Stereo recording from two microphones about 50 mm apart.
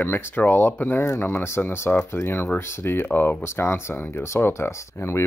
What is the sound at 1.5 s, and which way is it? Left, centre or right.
Speech, left.